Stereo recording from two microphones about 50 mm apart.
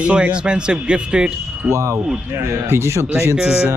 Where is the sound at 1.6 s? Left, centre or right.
Right.